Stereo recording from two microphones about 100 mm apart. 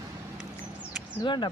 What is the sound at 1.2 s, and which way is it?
Speech, 50° left (ahead or behind).